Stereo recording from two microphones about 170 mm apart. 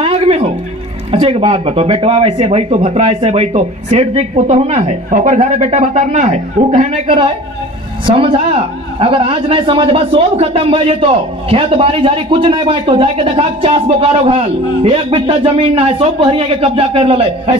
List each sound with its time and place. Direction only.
0.0 s music: 35° right (ahead or behind)
1.1 s a man's voice: 35° right (ahead or behind)
7.1 s a man's voice: 30° right (ahead or behind)